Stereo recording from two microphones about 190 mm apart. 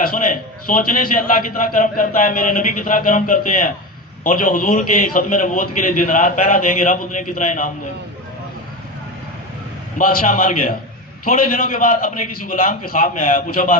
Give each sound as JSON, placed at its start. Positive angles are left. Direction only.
{"t": 0.0, "sound": "a man's voice", "side_deg": 50}
{"t": 9.9, "sound": "a man's voice", "side_deg": 45}